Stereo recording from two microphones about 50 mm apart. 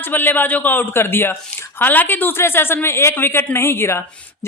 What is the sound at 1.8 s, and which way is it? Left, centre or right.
A man's voice, left.